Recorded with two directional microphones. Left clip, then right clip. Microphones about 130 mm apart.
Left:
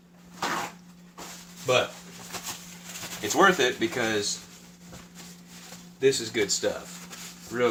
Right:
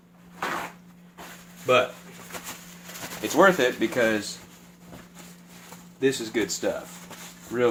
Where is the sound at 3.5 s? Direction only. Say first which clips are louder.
Right 3 dB; 45° right (ahead or behind).